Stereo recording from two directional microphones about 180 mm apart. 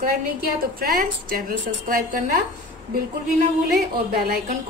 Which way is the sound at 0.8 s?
50° right (ahead or behind).